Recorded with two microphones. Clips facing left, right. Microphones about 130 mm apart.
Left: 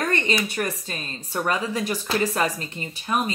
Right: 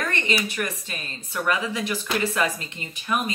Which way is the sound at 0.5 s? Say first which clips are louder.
Left 2 dB; 35° left (ahead or behind).